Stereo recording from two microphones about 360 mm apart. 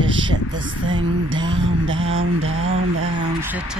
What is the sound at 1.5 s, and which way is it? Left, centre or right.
Mantra, right.